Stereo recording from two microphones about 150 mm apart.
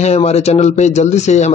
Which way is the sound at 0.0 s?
45° left (ahead or behind).